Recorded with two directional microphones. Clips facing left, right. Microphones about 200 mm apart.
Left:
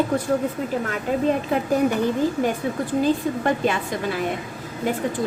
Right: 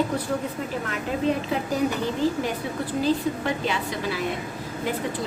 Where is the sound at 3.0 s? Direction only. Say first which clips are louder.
Left 2 dB; 50° left (ahead or behind).